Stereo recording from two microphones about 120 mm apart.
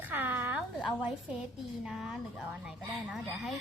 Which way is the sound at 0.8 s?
Centre (ahead or behind).